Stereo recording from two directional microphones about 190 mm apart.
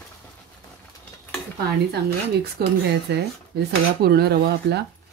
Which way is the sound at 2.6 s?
55° right (ahead or behind).